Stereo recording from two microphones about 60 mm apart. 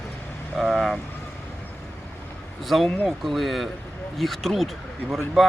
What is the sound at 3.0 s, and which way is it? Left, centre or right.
Speech, centre.